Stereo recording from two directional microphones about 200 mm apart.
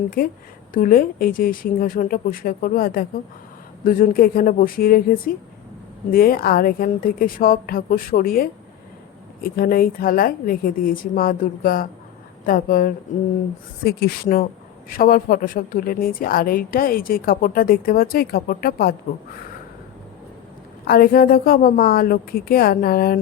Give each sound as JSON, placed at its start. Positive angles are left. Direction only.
{"t": 0.2, "sound": "a woman's voice", "side_deg": 45}
{"t": 20.8, "sound": "a woman's voice", "side_deg": 45}